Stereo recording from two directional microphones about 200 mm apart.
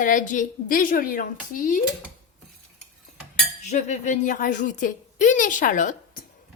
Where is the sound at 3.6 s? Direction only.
35° left (ahead or behind).